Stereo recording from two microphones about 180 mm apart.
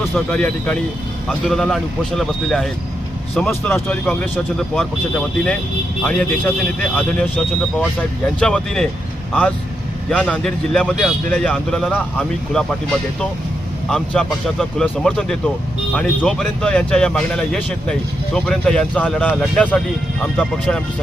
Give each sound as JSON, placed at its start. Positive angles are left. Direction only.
{"t": 0.3, "sound": "speech", "side_deg": 5}
{"t": 10.1, "sound": "speech", "side_deg": 5}
{"t": 13.9, "sound": "speech", "side_deg": 5}